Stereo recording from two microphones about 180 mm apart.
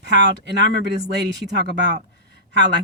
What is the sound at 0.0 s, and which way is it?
Speech, 75° right (ahead or behind).